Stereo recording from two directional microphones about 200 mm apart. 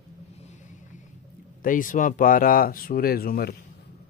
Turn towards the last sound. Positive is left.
turn(degrees=50)  # may be behind; listen again after turning